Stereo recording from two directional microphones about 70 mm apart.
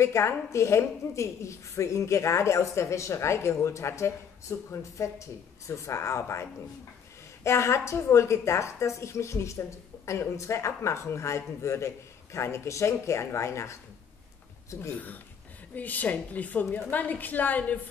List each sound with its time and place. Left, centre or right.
0.0 s a woman's voice: left
7.4 s a woman's voice: left
15.7 s a woman's voice: left